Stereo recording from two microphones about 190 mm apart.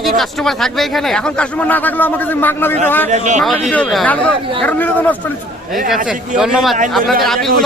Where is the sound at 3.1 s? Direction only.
40° right (ahead or behind).